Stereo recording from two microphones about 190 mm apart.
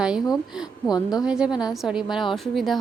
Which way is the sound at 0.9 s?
20° left (ahead or behind).